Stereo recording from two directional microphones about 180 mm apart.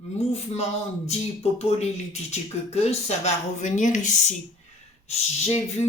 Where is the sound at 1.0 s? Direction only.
35° left (ahead or behind).